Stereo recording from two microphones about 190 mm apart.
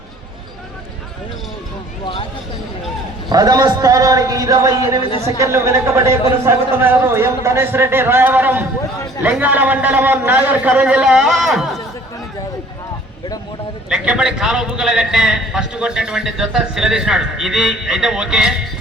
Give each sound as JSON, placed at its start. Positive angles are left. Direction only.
{"t": 3.2, "sound": "a man's voice", "side_deg": -20}
{"t": 13.9, "sound": "a man's voice", "side_deg": -5}